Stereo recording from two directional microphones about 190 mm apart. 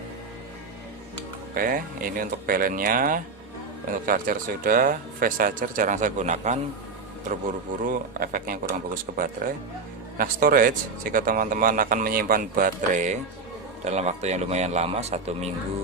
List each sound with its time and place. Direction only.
1.5 s speech: 50° right (ahead or behind)